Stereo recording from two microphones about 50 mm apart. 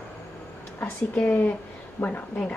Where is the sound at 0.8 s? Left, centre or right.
Left.